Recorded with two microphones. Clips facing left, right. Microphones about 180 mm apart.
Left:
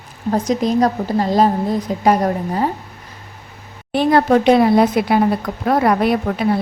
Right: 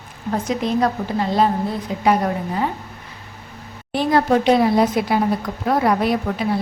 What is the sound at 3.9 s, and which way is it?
A woman's voice, 60° left (ahead or behind).